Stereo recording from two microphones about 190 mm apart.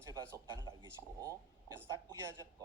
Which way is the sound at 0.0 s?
15° right (ahead or behind).